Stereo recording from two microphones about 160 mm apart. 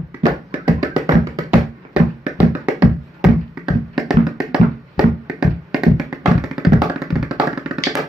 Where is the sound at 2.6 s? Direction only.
5° right (ahead or behind).